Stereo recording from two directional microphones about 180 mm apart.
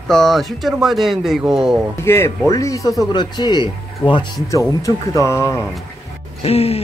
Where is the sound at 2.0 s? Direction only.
15° left (ahead or behind).